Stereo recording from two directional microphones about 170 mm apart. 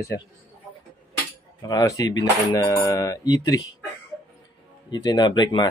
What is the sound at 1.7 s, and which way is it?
Speech, 20° left (ahead or behind).